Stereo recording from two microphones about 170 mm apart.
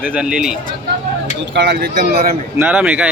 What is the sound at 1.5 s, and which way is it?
Speech, 70° right (ahead or behind).